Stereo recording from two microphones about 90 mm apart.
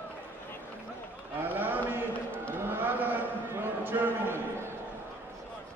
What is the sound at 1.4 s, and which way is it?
Run, 20° right (ahead or behind).